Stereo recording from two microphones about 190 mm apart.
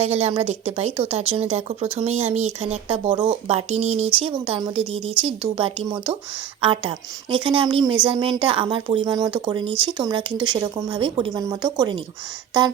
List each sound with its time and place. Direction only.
0.0 s speech: 35° right (ahead or behind)